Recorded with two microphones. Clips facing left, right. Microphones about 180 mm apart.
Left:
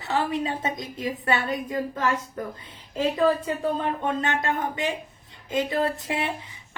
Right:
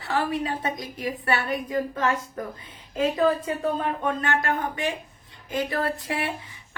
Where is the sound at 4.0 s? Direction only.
20° left (ahead or behind).